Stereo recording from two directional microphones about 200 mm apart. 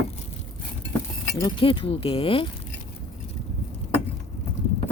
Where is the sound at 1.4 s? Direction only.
25° left (ahead or behind).